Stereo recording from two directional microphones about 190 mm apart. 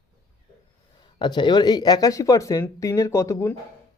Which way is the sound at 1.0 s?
25° left (ahead or behind).